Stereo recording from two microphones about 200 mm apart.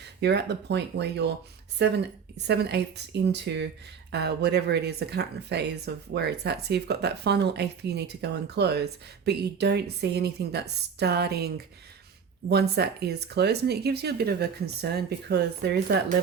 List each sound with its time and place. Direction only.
0.2 s speech: 55° right (ahead or behind)
2.5 s speech: 55° right (ahead or behind)